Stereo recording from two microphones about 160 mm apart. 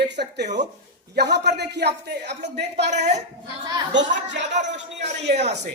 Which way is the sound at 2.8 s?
45° right (ahead or behind).